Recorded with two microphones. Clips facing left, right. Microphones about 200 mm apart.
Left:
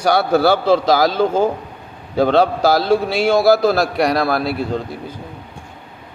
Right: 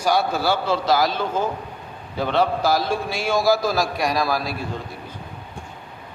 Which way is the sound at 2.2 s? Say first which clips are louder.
Left 7 dB; 90° left.